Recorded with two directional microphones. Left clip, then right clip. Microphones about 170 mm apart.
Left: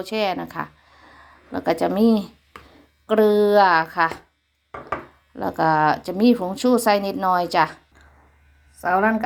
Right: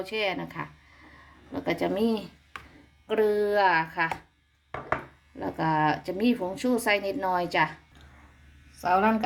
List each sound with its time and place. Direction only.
0.0 s speech: 20° left (ahead or behind)
5.4 s speech: 20° left (ahead or behind)